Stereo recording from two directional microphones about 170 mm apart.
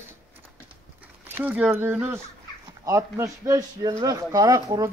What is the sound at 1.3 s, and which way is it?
A man's voice, 10° right (ahead or behind).